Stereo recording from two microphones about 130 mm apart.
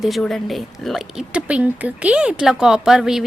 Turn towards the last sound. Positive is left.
turn(degrees=-5)  # may be behind; listen again after turning